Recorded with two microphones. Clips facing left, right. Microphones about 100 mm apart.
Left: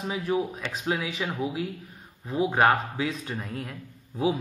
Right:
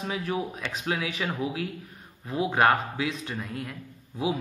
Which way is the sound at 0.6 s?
35° left (ahead or behind).